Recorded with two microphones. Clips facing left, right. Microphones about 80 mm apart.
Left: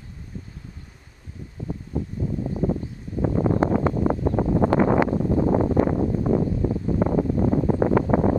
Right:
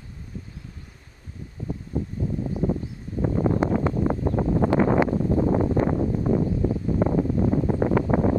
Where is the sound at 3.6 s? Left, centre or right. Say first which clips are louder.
Left 2 dB; left.